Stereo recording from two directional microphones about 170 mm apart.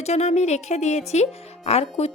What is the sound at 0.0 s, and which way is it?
Speech, 40° left (ahead or behind).